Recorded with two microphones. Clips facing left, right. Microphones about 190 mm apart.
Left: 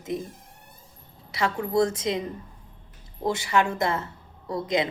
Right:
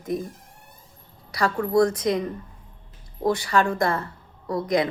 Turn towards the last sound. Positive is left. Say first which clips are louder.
# right 3 dB
turn(degrees=25)  # may be behind; listen again after turning